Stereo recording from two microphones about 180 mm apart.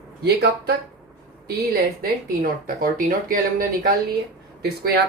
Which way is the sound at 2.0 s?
50° right (ahead or behind).